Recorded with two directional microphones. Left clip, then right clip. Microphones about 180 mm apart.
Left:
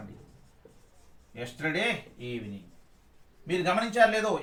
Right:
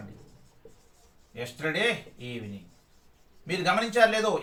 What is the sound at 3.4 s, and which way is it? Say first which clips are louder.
Speech: right 1 dB; 20° right (ahead or behind).